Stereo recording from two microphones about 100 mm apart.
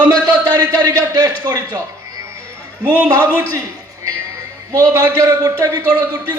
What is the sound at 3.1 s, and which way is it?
Speech, 30° right (ahead or behind).